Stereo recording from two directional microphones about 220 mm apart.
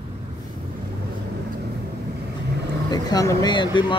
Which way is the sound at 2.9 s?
15° left (ahead or behind).